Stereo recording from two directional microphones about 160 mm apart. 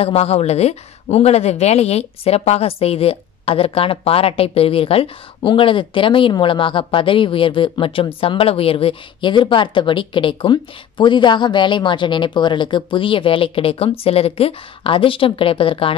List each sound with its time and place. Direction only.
0.0 s a woman's voice: 40° left (ahead or behind)